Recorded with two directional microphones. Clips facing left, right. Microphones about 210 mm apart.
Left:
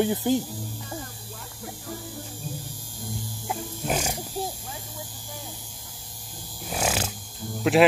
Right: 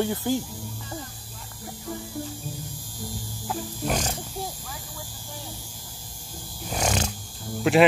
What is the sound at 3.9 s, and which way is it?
Speech, 10° left (ahead or behind).